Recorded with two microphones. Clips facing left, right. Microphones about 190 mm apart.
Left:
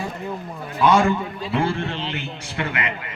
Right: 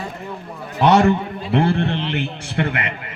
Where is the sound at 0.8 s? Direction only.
65° right (ahead or behind).